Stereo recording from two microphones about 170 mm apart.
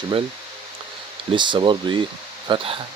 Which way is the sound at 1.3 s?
30° right (ahead or behind).